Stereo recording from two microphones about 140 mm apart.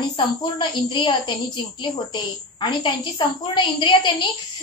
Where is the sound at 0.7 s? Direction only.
35° left (ahead or behind).